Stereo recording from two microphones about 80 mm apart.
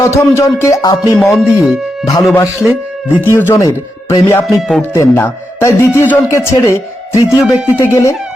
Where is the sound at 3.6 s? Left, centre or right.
Left.